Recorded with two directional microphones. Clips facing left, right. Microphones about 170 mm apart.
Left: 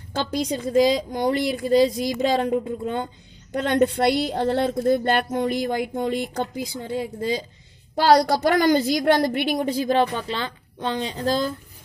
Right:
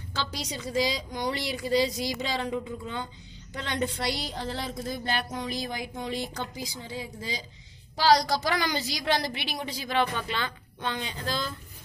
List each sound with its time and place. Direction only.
0.1 s a woman's voice: 55° left (ahead or behind)